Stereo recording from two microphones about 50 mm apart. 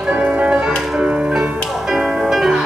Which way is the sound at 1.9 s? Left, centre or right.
Centre.